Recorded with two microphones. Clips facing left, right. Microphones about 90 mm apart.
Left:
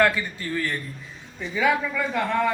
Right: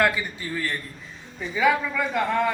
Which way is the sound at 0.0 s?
5° right (ahead or behind).